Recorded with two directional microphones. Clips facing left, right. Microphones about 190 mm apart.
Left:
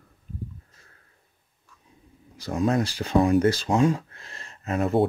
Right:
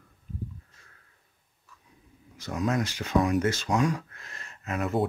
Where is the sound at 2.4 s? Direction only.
30° left (ahead or behind).